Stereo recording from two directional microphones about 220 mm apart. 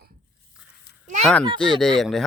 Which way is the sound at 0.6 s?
5° right (ahead or behind).